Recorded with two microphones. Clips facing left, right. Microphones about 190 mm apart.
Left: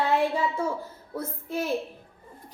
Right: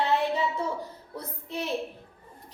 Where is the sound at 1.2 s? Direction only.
50° left (ahead or behind).